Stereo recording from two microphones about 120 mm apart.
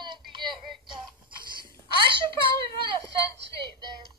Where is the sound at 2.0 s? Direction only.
45° right (ahead or behind).